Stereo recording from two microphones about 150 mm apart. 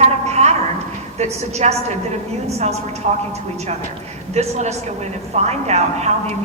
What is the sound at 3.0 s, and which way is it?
Speech, 55° right (ahead or behind).